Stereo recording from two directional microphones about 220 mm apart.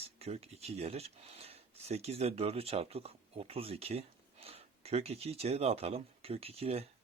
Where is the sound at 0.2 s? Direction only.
25° right (ahead or behind).